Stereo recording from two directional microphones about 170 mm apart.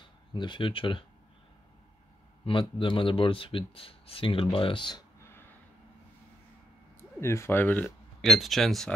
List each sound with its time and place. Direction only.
0.3 s speech: 25° left (ahead or behind)
2.4 s speech: 30° left (ahead or behind)
7.2 s speech: 15° left (ahead or behind)
8.2 s speech: centre (ahead or behind)